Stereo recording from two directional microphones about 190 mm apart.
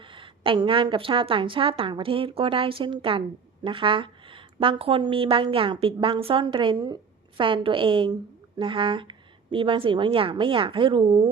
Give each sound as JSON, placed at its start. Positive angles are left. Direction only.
{"t": 0.0, "sound": "a woman's voice", "side_deg": -25}